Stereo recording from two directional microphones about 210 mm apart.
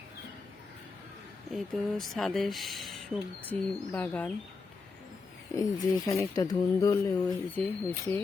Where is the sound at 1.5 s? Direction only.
Centre (ahead or behind).